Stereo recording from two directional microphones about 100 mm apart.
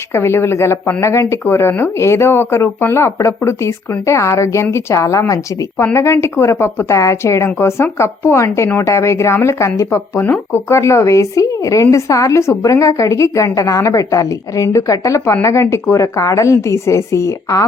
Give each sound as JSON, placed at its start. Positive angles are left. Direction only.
{"t": 0.1, "sound": "speech", "side_deg": 25}